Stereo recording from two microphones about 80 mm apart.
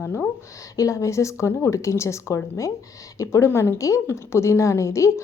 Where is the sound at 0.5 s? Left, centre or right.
Left.